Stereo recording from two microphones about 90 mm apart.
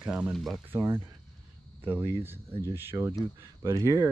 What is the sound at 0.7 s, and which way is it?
Speech, 25° right (ahead or behind).